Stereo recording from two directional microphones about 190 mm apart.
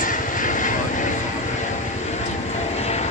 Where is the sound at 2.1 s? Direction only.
35° left (ahead or behind).